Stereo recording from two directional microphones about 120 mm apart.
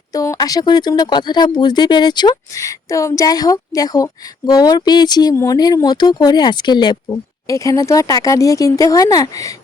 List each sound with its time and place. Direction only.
0.1 s speech: 30° left (ahead or behind)
5.3 s speech: 20° left (ahead or behind)
5.5 s speech: 35° left (ahead or behind)